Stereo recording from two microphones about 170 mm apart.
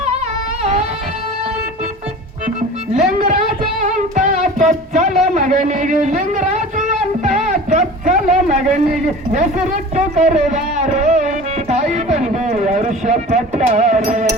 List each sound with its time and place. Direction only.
3.2 s music: 50° right (ahead or behind)
5.2 s a sound: 45° right (ahead or behind)
9.9 s music: 45° right (ahead or behind)